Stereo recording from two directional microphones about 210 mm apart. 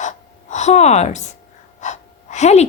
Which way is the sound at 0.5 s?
35° left (ahead or behind).